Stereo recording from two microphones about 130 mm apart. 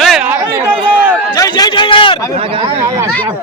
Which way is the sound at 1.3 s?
30° left (ahead or behind).